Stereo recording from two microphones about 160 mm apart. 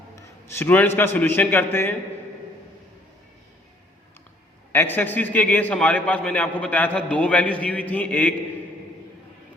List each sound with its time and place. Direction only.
0.2 s a man's voice: 15° left (ahead or behind)
4.7 s a man's voice: 15° left (ahead or behind)